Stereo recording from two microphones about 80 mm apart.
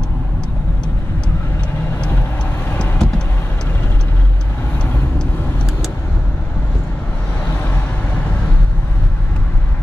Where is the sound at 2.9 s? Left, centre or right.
Centre.